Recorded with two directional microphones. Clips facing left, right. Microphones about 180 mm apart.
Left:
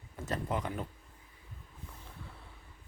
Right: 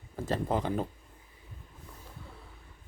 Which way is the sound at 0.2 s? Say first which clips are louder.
Right 5 dB; 30° right (ahead or behind).